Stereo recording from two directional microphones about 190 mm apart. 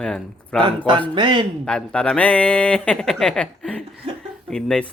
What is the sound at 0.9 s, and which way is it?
Speech, 25° right (ahead or behind).